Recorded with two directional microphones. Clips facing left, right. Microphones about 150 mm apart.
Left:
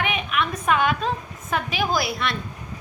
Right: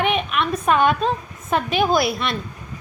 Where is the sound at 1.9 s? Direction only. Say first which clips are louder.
Right 5 dB; 25° right (ahead or behind).